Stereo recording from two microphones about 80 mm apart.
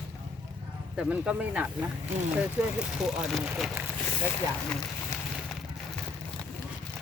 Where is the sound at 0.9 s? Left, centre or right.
Centre.